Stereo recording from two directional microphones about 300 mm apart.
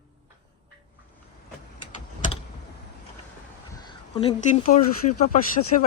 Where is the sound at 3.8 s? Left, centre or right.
Left.